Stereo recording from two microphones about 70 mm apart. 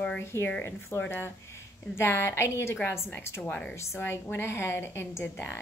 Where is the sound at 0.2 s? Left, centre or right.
Left.